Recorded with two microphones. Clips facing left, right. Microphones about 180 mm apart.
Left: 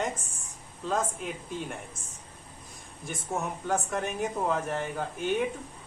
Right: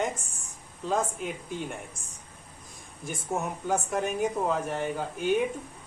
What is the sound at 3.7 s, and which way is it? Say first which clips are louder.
Speech: right 2 dB; centre (ahead or behind).